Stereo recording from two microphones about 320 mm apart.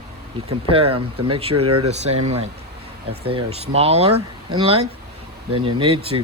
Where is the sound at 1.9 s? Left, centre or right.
Right.